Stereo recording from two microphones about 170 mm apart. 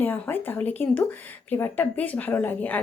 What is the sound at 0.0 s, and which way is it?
Speech, 10° left (ahead or behind).